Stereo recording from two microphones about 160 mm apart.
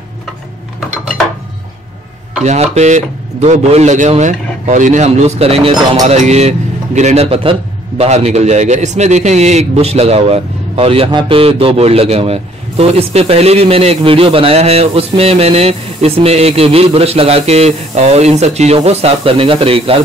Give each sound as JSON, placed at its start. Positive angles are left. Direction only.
{"t": 0.7, "sound": "dishes", "side_deg": 5}
{"t": 2.4, "sound": "a man's voice", "side_deg": -45}